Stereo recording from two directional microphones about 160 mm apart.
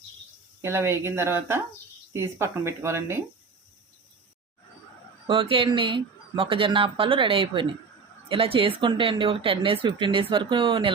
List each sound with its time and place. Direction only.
0.6 s speech: 15° right (ahead or behind)
5.3 s speech: 35° right (ahead or behind)